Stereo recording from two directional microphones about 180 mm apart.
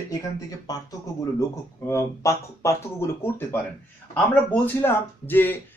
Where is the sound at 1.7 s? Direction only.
15° left (ahead or behind).